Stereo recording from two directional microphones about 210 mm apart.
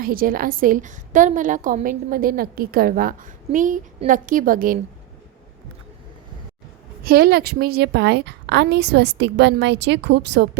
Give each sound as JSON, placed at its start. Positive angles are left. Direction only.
{"t": 0.0, "sound": "a woman's voice", "side_deg": -45}
{"t": 7.0, "sound": "a woman's voice", "side_deg": -45}